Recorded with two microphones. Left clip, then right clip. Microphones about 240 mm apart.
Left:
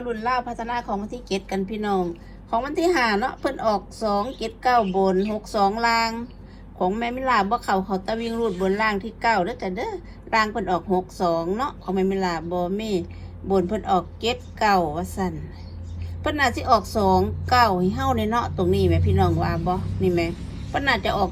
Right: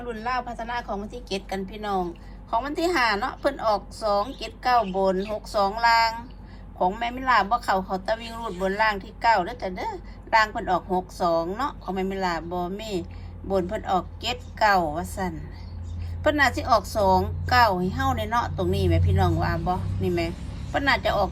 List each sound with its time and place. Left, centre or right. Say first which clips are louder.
0.1 s a woman's voice: left 4 dB; centre; by 15.0 s right
16.2 s a woman's voice: right 1 dB; right